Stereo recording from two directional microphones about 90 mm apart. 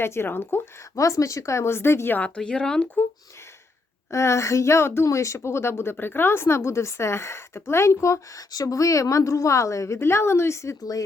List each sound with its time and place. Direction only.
0.0 s speech: 25° left (ahead or behind)
0.9 s speech: 35° left (ahead or behind); by 3.0 s 10° left (ahead or behind)
4.1 s a woman's voice: 35° left (ahead or behind)